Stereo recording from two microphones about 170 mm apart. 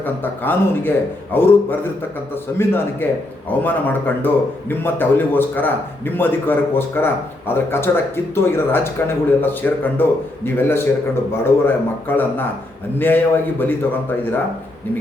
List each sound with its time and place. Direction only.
0.0 s a man's voice: 10° left (ahead or behind)